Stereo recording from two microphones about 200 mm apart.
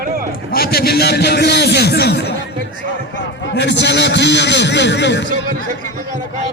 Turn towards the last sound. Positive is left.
turn(degrees=60)  # may be behind; listen again after turning